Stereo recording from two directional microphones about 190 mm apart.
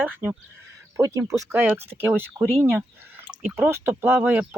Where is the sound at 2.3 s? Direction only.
Centre (ahead or behind).